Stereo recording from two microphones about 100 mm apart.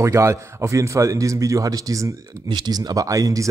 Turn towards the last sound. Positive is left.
turn(degrees=-35)  # may be behind; listen again after turning